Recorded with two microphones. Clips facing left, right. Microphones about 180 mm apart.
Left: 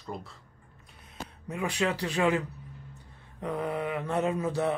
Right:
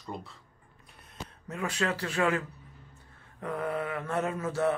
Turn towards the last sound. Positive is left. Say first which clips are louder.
# left 1 dB
turn(degrees=15)  # may be behind; listen again after turning